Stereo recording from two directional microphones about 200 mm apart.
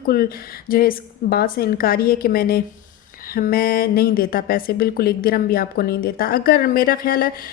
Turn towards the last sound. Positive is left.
turn(degrees=45)  # may be behind; listen again after turning